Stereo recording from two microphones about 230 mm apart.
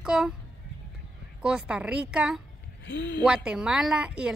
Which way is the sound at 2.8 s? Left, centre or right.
Left.